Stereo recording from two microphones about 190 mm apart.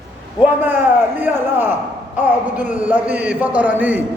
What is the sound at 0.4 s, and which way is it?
A man's voice, 10° right (ahead or behind).